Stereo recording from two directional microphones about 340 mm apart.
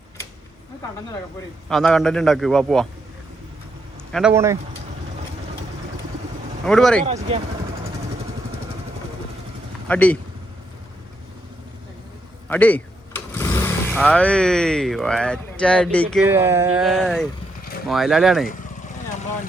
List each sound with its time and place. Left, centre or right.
1.7 s a man's voice: centre
4.1 s a man's voice: centre
6.7 s a man's voice: centre
7.0 s speech: centre
9.9 s a man's voice: centre
12.5 s a man's voice: centre